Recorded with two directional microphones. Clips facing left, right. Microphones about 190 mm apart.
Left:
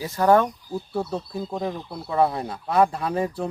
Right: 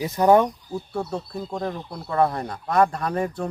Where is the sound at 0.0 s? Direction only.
20° right (ahead or behind).